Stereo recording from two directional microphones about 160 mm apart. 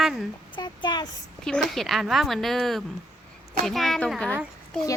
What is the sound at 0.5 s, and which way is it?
Speech, 30° left (ahead or behind).